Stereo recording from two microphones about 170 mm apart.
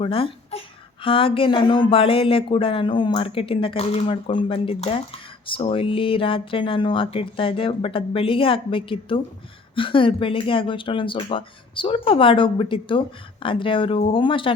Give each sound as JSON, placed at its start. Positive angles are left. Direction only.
{"t": 0.0, "sound": "speech", "side_deg": 30}